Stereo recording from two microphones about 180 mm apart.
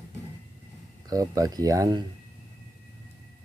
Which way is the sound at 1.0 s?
20° right (ahead or behind).